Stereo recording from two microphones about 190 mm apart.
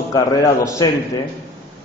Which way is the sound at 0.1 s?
15° left (ahead or behind).